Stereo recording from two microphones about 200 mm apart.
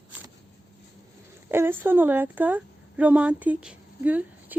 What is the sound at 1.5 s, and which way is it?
A woman's voice, 10° right (ahead or behind).